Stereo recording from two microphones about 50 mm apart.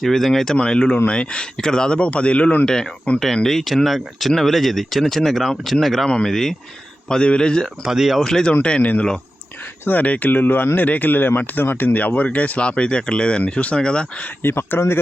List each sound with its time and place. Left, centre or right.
0.0 s speech: centre
0.5 s speech: centre
2.6 s speech: centre
7.1 s speech: centre
7.9 s speech: centre
8.2 s speech: centre
8.8 s speech: left
14.4 s speech: left